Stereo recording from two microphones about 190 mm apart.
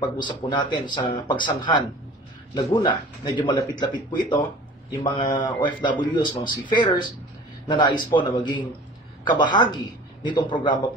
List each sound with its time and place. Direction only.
0.0 s a man's voice: 25° left (ahead or behind)